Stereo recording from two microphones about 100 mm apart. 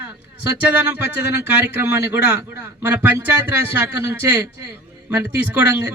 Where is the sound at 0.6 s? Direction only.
15° right (ahead or behind).